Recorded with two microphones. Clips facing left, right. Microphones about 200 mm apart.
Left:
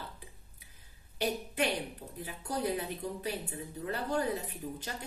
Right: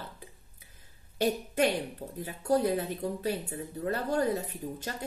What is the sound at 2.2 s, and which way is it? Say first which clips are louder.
A woman's voice: right 8 dB; 45° right (ahead or behind).